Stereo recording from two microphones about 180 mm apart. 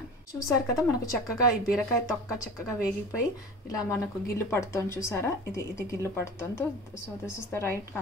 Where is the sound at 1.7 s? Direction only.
5° right (ahead or behind).